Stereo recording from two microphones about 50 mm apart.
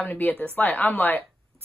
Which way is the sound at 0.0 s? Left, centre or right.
Left.